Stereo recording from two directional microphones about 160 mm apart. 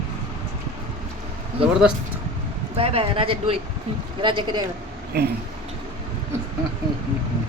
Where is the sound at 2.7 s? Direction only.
35° right (ahead or behind).